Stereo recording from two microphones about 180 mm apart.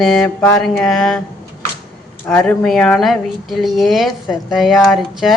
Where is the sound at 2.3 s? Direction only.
5° left (ahead or behind).